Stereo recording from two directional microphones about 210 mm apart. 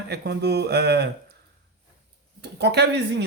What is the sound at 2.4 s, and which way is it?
Speech, 55° right (ahead or behind).